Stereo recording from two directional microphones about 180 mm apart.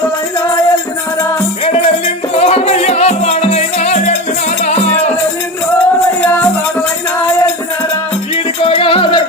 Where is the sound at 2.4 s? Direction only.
35° left (ahead or behind).